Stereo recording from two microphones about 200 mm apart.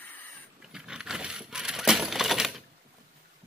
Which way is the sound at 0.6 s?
5° right (ahead or behind).